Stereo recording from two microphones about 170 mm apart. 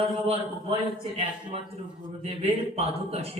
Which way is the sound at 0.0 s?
35° right (ahead or behind).